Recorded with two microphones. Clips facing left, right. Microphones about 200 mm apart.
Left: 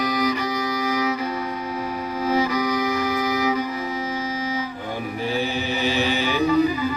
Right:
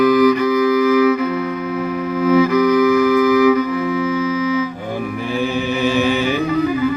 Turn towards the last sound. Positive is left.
turn(degrees=-55)  # may be behind; listen again after turning